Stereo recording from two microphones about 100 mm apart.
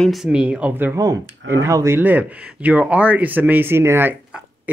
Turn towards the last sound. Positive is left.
turn(degrees=-25)  # may be behind; listen again after turning